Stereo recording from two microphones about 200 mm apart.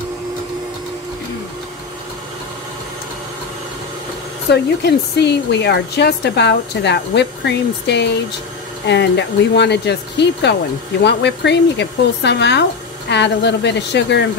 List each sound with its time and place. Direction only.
4.5 s speech: 55° left (ahead or behind)